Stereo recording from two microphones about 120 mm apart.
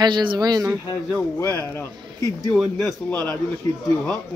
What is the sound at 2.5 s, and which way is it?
Speech, 5° left (ahead or behind).